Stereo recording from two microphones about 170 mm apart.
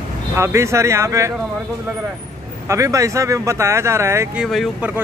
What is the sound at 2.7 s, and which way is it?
Speech, 20° right (ahead or behind).